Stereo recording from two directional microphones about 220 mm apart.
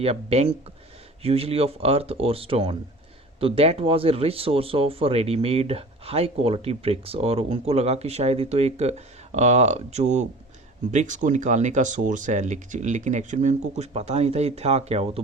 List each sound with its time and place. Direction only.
0.0 s speech: 30° right (ahead or behind)